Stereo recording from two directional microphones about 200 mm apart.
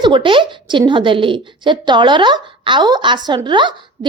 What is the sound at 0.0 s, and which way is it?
A woman's voice, 25° right (ahead or behind).